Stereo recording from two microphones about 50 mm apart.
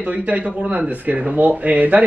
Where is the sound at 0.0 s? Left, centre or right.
Right.